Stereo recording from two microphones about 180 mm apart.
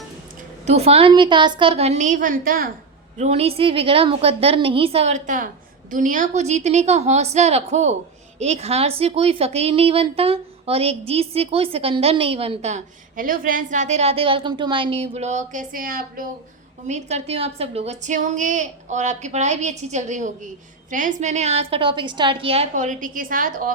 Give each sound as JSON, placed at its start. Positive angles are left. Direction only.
{"t": 0.6, "sound": "a woman's voice", "side_deg": -35}
{"t": 3.2, "sound": "a woman's voice", "side_deg": -35}
{"t": 16.8, "sound": "a woman's voice", "side_deg": -40}